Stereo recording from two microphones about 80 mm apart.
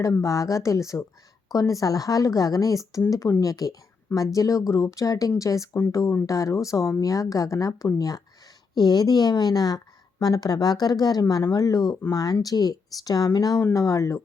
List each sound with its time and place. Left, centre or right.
0.0 s a woman's voice: left